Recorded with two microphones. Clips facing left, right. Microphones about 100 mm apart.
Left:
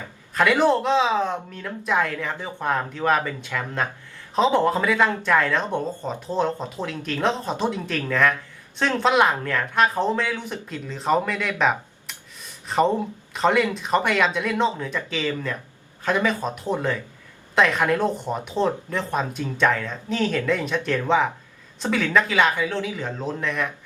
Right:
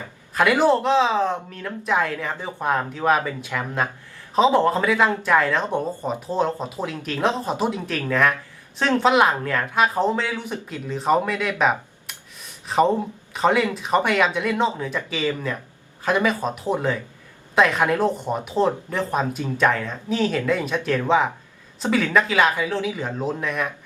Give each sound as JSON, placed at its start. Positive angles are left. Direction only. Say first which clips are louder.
{"t": 0.3, "sound": "speech", "louder": "right 1 dB", "side_deg": -5}